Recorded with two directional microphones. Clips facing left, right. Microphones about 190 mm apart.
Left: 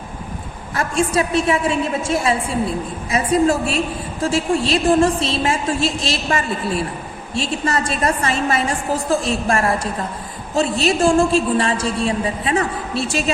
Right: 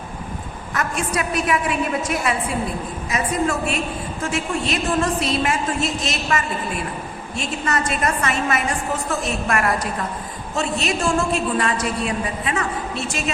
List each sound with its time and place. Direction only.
0.7 s a woman's voice: 30° left (ahead or behind)